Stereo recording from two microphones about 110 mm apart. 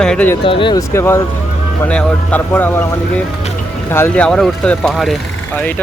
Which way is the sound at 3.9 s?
20° left (ahead or behind).